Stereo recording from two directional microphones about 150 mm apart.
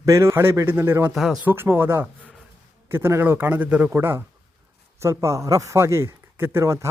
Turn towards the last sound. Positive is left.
turn(degrees=-20)  # may be behind; listen again after turning